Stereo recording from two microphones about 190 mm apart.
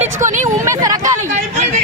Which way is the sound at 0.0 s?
40° right (ahead or behind).